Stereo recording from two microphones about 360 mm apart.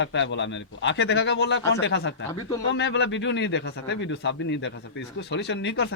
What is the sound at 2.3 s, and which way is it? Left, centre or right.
Speech, centre.